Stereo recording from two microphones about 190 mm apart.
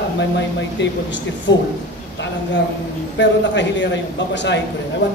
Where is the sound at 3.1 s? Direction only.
70° left (ahead or behind).